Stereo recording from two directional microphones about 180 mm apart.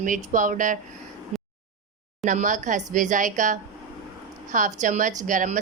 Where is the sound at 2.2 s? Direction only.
45° right (ahead or behind).